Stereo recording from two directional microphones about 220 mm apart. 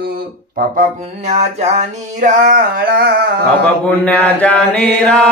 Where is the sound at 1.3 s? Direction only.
30° right (ahead or behind).